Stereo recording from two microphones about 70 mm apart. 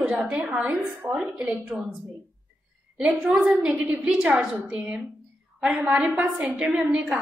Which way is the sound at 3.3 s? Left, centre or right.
Centre.